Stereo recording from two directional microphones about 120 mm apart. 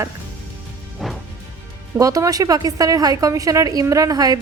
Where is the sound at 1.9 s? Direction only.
25° right (ahead or behind).